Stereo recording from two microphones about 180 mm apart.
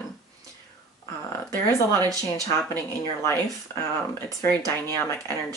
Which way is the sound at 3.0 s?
15° left (ahead or behind).